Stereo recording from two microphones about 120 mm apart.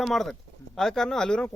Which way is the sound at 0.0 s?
Centre (ahead or behind).